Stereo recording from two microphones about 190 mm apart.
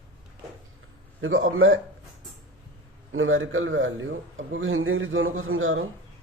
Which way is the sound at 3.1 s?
90° right.